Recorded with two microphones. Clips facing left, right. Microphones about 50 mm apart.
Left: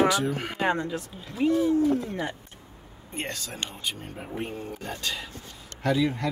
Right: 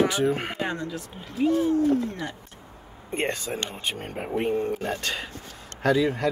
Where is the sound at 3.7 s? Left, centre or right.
Right.